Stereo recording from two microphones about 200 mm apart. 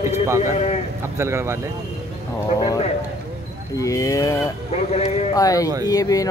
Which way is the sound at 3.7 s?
15° left (ahead or behind).